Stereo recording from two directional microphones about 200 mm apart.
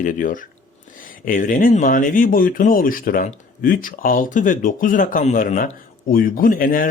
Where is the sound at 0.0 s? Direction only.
40° left (ahead or behind).